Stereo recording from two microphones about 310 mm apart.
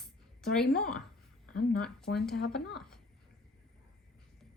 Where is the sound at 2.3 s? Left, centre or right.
Left.